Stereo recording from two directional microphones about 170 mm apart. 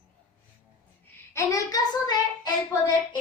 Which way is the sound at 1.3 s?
20° left (ahead or behind).